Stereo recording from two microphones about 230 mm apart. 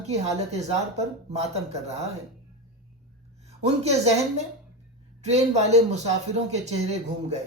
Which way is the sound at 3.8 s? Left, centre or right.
Right.